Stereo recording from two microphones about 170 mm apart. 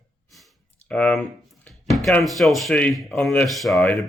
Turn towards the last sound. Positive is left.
turn(degrees=0)  # may be behind; listen again after turning